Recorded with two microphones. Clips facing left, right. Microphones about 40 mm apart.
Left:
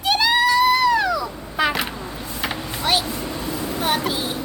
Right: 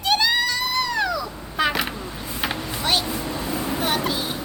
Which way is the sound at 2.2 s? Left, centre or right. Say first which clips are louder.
Even; centre.